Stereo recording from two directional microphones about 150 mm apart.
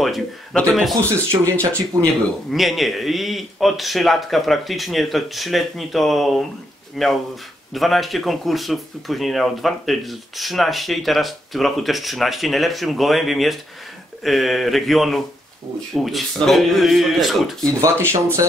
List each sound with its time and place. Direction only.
0.0 s speech: centre (ahead or behind)
1.4 s speech: 20° right (ahead or behind)
2.5 s speech: centre (ahead or behind)